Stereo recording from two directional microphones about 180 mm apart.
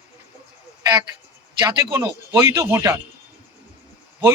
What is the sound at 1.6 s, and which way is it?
Speech, 10° right (ahead or behind).